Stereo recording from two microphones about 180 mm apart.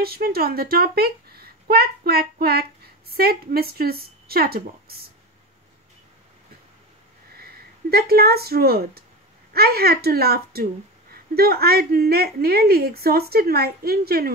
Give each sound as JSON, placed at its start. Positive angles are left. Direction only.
{"t": 0.0, "sound": "a woman's voice", "side_deg": -60}
{"t": 7.3, "sound": "a woman's voice", "side_deg": -60}